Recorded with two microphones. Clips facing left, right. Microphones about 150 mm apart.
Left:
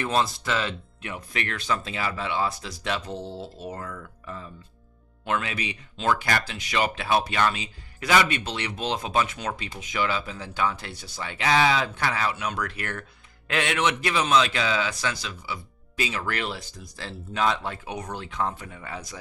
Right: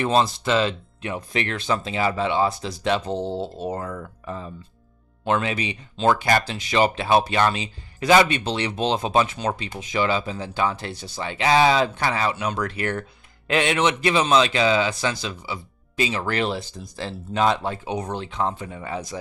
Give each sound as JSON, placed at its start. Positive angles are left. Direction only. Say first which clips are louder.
{"t": 0.0, "sound": "a man's voice", "louder": "right 5 dB", "side_deg": -25}